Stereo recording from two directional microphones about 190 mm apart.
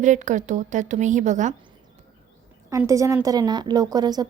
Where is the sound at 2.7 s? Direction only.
15° right (ahead or behind).